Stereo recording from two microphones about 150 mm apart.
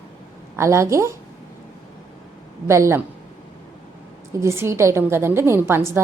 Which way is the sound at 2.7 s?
20° right (ahead or behind).